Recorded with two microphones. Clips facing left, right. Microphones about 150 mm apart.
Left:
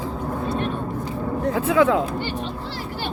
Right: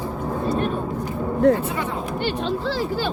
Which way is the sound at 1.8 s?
90° left.